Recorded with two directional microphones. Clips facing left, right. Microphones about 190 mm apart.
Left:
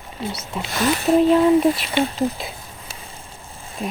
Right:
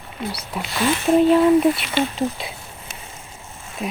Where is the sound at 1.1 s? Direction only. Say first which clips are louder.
Even; centre (ahead or behind).